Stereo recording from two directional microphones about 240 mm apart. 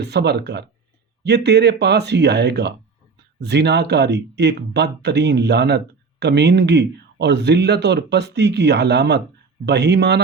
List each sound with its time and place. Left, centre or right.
0.0 s speech: right